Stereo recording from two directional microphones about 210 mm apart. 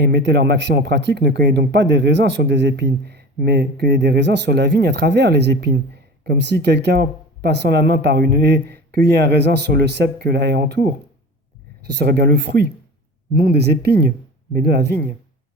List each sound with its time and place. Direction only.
0.0 s speech: 55° right (ahead or behind)